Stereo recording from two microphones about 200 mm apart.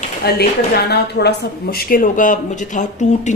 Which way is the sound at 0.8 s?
55° left (ahead or behind).